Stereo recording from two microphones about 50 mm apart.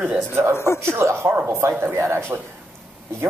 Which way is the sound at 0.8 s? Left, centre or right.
Right.